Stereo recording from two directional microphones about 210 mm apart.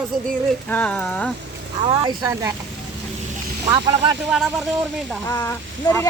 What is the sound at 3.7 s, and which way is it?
Speech, 20° right (ahead or behind).